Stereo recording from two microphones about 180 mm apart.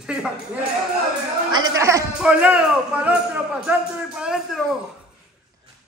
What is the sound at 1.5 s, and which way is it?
Speech, 20° right (ahead or behind).